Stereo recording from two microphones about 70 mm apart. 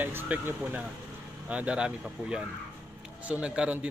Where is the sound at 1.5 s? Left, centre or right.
Centre.